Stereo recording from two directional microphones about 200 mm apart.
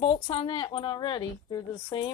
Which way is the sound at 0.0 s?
30° left (ahead or behind).